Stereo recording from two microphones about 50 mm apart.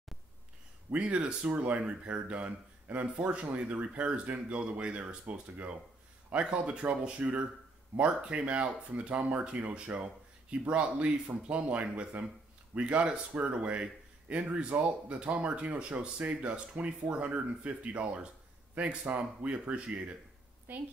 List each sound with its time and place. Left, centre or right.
0.9 s speech: right
20.7 s a woman's voice: right